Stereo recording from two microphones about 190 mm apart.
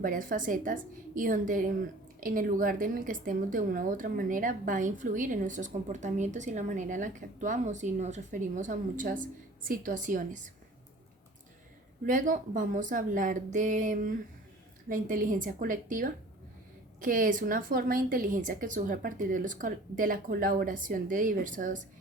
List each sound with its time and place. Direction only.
0.0 s a woman's voice: 45° right (ahead or behind)
12.0 s a woman's voice: 45° right (ahead or behind)